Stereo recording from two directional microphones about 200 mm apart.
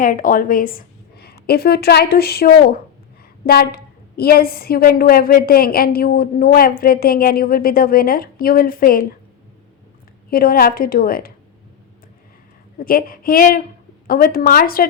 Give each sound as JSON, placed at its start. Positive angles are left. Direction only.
{"t": 0.0, "sound": "a woman's voice", "side_deg": 45}
{"t": 10.2, "sound": "a woman's voice", "side_deg": 45}
{"t": 12.8, "sound": "a woman's voice", "side_deg": 45}